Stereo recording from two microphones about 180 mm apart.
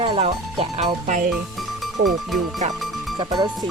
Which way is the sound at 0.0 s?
35° right (ahead or behind).